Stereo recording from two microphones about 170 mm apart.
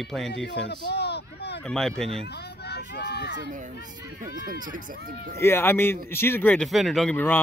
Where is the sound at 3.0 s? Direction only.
80° left.